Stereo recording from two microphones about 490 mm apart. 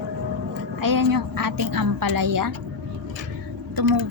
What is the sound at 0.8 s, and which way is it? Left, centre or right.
A woman's voice, right.